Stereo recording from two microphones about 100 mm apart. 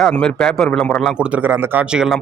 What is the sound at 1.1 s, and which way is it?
Speech, 10° right (ahead or behind).